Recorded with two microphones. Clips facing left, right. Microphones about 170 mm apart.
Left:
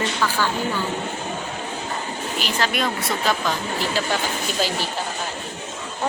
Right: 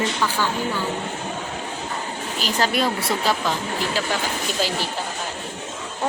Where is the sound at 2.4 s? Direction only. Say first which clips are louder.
Right 2 dB; 40° right (ahead or behind).